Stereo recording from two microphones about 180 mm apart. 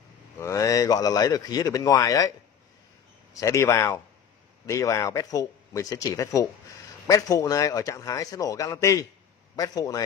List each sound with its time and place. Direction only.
0.4 s speech: 15° left (ahead or behind)
3.3 s speech: 15° left (ahead or behind)